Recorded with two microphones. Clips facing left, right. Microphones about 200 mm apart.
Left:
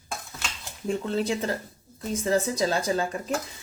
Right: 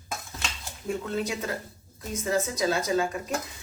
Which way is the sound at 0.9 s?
30° left (ahead or behind).